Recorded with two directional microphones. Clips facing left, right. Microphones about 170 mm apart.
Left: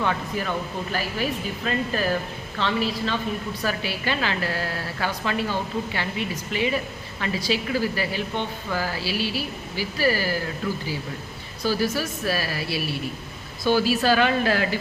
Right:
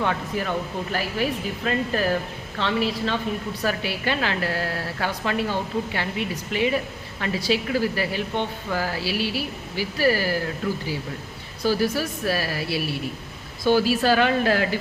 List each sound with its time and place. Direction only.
0.0 s a woman's voice: 55° right (ahead or behind)
1.7 s a woman's voice: 55° right (ahead or behind)
11.6 s speech: 55° right (ahead or behind)